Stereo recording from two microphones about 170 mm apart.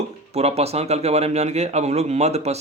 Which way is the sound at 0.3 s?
40° right (ahead or behind).